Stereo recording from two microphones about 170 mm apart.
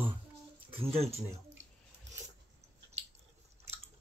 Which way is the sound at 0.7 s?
35° right (ahead or behind).